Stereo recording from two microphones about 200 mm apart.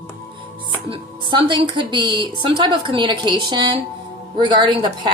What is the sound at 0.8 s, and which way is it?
A woman's voice, 25° right (ahead or behind).